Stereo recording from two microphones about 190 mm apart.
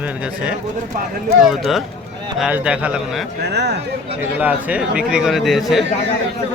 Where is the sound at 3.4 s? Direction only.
60° right (ahead or behind).